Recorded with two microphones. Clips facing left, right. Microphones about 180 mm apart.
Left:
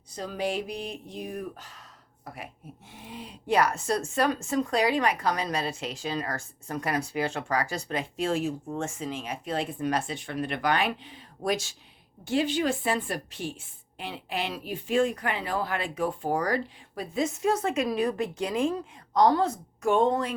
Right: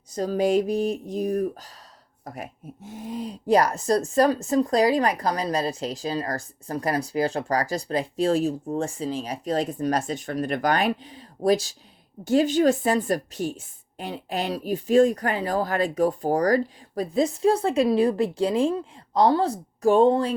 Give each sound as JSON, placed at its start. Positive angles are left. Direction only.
{"t": 0.1, "sound": "speech", "side_deg": -45}